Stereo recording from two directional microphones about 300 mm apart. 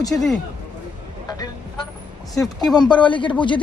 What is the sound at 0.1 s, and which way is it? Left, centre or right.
Speech, centre.